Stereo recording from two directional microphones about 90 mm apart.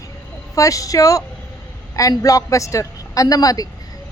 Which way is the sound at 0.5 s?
40° left (ahead or behind).